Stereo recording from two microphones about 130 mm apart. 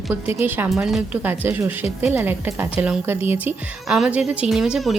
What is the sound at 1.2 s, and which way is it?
A woman's voice, 15° right (ahead or behind).